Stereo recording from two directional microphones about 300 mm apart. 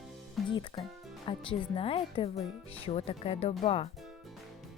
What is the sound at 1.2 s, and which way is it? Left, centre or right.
Speech, centre.